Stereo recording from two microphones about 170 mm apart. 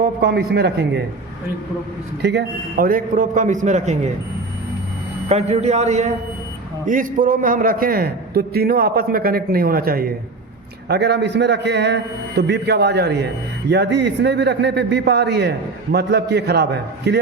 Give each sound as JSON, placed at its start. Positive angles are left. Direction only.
{"t": 0.0, "sound": "a man's voice", "side_deg": -65}
{"t": 2.2, "sound": "a man's voice", "side_deg": -75}
{"t": 5.3, "sound": "a man's voice", "side_deg": -40}
{"t": 6.8, "sound": "a man's voice", "side_deg": -50}
{"t": 10.8, "sound": "a man's voice", "side_deg": -80}
{"t": 12.4, "sound": "a man's voice", "side_deg": -80}